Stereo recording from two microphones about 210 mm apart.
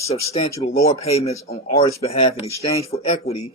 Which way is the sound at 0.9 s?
30° left (ahead or behind).